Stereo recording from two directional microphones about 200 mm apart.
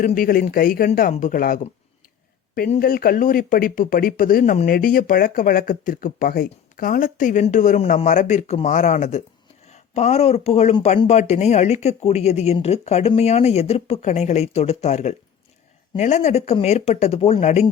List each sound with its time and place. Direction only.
0.0 s speech: 45° left (ahead or behind)
2.7 s speech: 45° left (ahead or behind)